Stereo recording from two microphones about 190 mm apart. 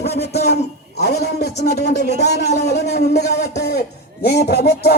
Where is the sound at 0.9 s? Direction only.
60° left (ahead or behind).